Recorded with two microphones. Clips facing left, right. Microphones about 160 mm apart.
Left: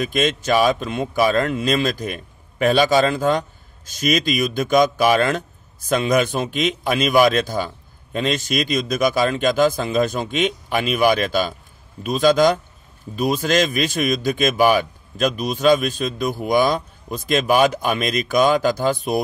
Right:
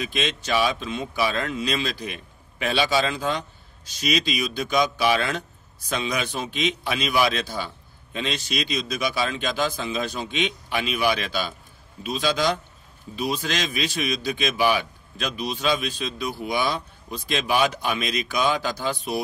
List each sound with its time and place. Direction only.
0.0 s speech: 45° left (ahead or behind)